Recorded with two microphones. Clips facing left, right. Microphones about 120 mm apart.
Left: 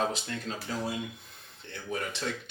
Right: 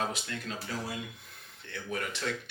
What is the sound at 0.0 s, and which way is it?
Speech, 25° left (ahead or behind).